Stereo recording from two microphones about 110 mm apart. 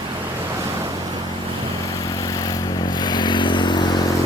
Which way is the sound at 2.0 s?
35° left (ahead or behind).